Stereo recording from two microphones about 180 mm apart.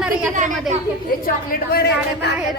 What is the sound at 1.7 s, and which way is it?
Speech, 65° left (ahead or behind).